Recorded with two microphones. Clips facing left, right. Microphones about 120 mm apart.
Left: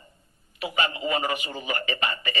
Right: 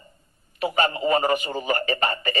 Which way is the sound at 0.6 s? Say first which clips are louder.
Right 5 dB; 40° right (ahead or behind).